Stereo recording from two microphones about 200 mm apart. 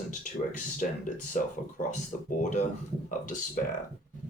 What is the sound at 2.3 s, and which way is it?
Speech, 35° left (ahead or behind).